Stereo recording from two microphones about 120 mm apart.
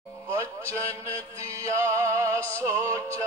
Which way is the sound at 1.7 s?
25° right (ahead or behind).